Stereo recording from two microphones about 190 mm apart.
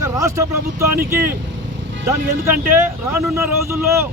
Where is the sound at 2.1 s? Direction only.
15° right (ahead or behind).